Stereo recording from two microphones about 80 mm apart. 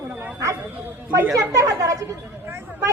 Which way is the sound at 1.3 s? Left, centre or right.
Right.